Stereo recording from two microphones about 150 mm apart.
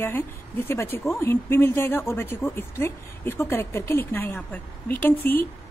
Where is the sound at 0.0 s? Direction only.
15° left (ahead or behind).